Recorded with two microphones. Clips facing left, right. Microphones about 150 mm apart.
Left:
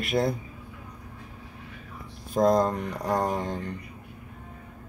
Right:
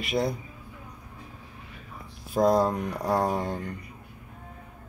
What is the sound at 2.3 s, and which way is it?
Speech, 5° right (ahead or behind).